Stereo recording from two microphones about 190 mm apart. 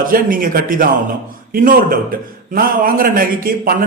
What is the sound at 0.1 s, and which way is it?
A man's voice, 45° right (ahead or behind).